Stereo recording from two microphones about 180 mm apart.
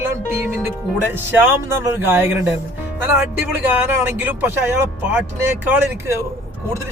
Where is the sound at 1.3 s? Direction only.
10° right (ahead or behind).